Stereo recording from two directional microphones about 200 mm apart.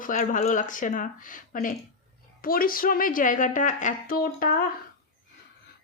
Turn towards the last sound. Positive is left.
turn(degrees=45)  # may be behind; listen again after turning